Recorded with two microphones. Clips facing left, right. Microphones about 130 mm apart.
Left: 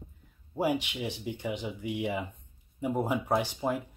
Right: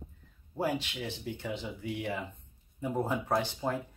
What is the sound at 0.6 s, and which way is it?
Speech, 15° left (ahead or behind).